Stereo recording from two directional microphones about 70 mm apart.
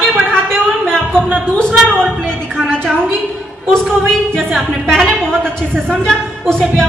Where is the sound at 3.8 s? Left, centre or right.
Centre.